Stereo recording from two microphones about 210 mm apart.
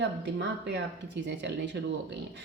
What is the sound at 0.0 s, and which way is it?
A woman's voice, 55° right (ahead or behind).